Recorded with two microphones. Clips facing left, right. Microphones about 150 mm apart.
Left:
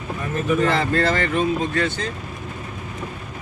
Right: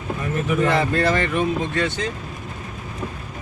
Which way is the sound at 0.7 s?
15° right (ahead or behind).